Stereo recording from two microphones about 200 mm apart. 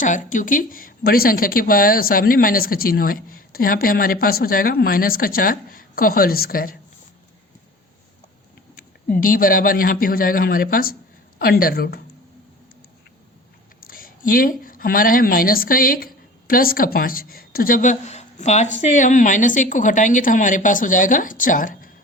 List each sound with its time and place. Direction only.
0.0 s a woman's voice: 40° left (ahead or behind)
9.1 s a woman's voice: 45° left (ahead or behind)
13.8 s a sound: 45° left (ahead or behind)
14.6 s a woman's voice: 45° left (ahead or behind)